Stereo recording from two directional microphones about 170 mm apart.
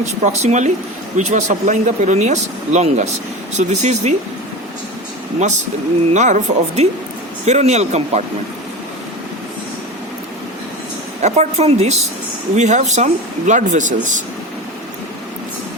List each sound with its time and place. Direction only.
0.4 s speech: 45° right (ahead or behind)
5.4 s a woman's voice: 45° right (ahead or behind)
11.2 s a woman's voice: 40° right (ahead or behind)